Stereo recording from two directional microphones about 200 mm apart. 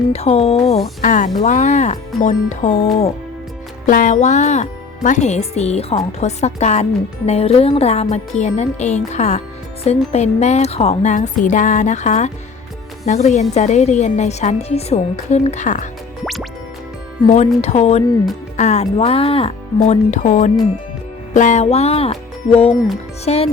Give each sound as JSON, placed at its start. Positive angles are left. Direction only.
{"t": 0.1, "sound": "speech", "side_deg": 30}
{"t": 16.2, "sound": "music", "side_deg": 0}
{"t": 17.2, "sound": "speech", "side_deg": 35}